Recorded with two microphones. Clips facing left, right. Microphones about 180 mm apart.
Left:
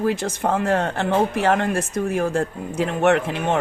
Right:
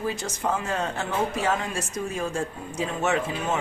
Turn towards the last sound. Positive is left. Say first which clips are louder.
# left 7 dB
turn(degrees=60)  # may be behind; listen again after turning